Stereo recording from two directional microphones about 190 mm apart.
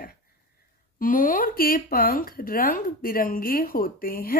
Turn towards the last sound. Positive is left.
turn(degrees=50)  # may be behind; listen again after turning